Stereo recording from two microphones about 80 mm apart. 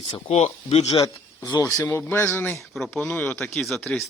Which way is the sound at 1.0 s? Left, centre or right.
Left.